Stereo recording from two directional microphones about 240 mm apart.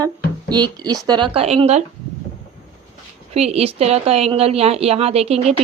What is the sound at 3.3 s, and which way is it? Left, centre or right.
A woman's voice, right.